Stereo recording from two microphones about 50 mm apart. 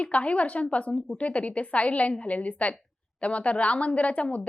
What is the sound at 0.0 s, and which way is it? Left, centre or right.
A woman's voice, left.